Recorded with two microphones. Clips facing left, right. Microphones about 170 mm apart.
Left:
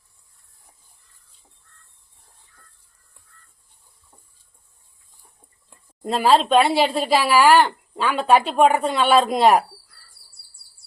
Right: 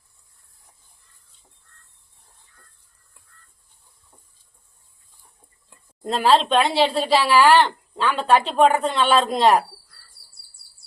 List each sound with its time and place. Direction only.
6.0 s speech: 5° left (ahead or behind)